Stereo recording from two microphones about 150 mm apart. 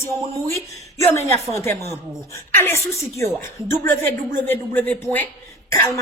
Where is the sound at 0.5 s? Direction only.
20° left (ahead or behind).